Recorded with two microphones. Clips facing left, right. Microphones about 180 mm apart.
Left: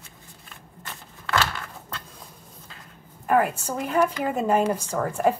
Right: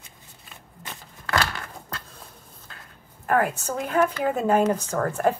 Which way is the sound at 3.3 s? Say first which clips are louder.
Left 1 dB; 5° left (ahead or behind).